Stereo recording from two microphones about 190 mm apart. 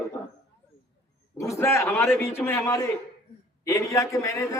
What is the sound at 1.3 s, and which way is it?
A man's voice, 15° left (ahead or behind).